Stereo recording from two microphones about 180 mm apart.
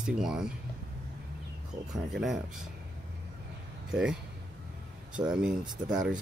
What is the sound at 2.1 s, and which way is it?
Speech, centre (ahead or behind).